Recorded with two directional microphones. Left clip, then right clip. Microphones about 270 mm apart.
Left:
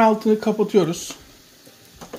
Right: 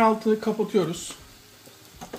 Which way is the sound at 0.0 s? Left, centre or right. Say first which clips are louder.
Left 4 dB; left.